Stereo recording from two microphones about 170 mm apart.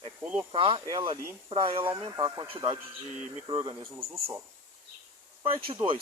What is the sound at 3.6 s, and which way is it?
Speech, 20° right (ahead or behind).